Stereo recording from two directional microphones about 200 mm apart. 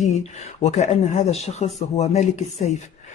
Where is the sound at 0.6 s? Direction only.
35° left (ahead or behind).